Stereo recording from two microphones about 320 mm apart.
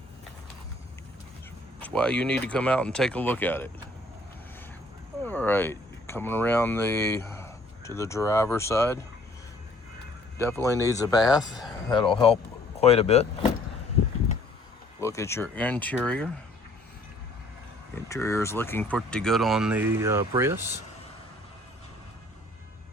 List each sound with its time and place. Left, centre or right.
1.8 s speech: centre
5.2 s speech: centre
10.3 s speech: centre
15.0 s speech: centre
17.9 s speech: centre